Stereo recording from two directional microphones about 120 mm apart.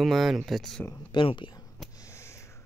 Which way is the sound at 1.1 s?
40° left (ahead or behind).